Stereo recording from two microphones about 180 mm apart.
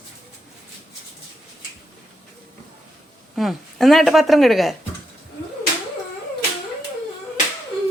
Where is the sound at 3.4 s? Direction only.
Centre (ahead or behind).